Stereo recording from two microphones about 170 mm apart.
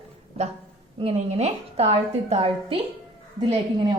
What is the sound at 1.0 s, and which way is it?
A woman's voice, 40° right (ahead or behind).